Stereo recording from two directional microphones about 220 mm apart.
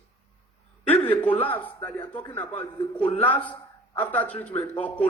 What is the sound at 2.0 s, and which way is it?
Speech, 20° left (ahead or behind).